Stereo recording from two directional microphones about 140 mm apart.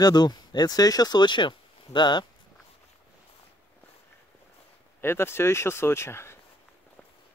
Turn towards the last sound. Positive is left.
turn(degrees=20)  # may be behind; listen again after turning